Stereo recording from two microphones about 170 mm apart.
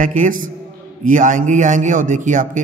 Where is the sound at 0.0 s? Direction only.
50° right (ahead or behind).